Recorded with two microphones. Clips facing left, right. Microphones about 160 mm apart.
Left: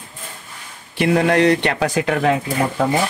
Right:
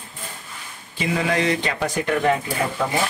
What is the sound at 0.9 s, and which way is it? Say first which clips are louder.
Speech: left 7 dB; 65° left (ahead or behind).